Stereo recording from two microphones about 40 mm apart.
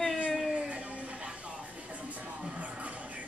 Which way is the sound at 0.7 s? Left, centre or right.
Right.